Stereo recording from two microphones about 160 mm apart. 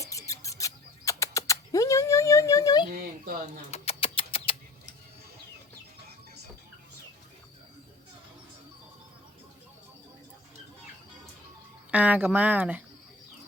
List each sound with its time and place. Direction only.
0.0 s rodents: 20° left (ahead or behind)
2.9 s speech: 60° right (ahead or behind)
3.7 s a sound: 35° left (ahead or behind)
11.9 s speech: 10° right (ahead or behind)